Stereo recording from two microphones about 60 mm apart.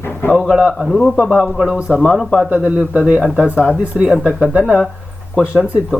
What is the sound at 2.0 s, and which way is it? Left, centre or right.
Speech, centre.